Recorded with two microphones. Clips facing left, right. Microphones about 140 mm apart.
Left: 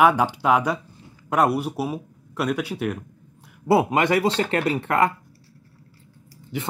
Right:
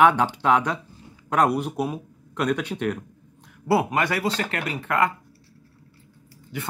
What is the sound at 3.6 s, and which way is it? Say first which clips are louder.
Speech: left 3 dB; 20° left (ahead or behind).